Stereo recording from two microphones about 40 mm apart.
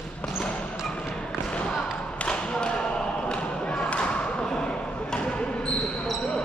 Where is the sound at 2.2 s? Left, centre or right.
Left.